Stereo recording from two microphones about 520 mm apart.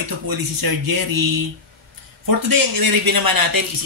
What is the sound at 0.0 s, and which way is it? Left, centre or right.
Speech, right.